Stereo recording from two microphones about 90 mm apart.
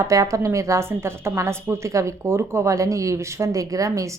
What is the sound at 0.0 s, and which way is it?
A woman's voice, 40° right (ahead or behind).